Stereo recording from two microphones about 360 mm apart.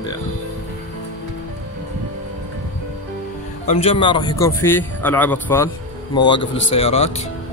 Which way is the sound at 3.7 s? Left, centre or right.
Centre.